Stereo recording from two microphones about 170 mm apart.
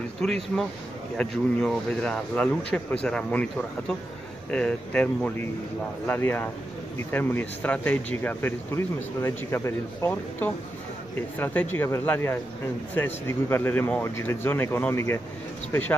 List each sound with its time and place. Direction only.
0.2 s speech: 5° left (ahead or behind)
11.3 s speech: 10° left (ahead or behind)